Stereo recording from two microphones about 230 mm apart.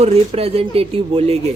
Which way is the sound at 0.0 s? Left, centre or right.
Right.